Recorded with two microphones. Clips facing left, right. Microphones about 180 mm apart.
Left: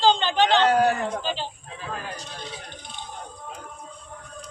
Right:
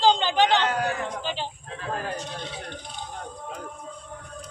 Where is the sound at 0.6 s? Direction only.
35° left (ahead or behind).